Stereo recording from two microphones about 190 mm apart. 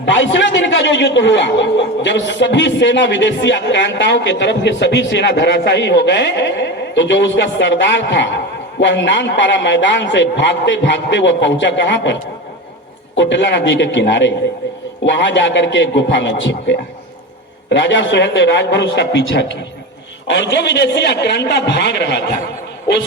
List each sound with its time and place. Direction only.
0.0 s speech: 70° left (ahead or behind)
13.1 s a man's voice: 70° left (ahead or behind)